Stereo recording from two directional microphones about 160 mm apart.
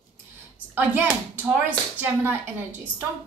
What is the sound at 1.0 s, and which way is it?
A woman's voice, 10° right (ahead or behind).